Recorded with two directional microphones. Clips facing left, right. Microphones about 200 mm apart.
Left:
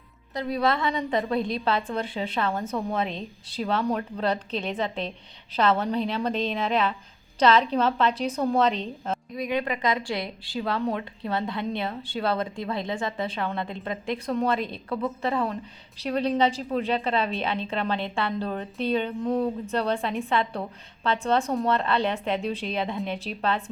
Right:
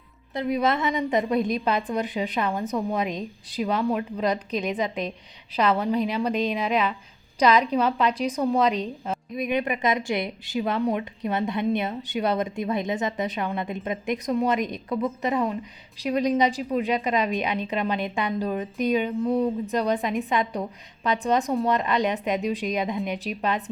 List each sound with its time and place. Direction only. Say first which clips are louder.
0.3 s a woman's voice: right 2 dB; 20° right (ahead or behind)